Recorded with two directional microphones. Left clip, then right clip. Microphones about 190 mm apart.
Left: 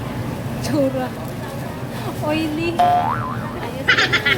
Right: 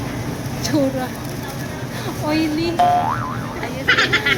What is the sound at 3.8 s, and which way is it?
Goose, centre (ahead or behind).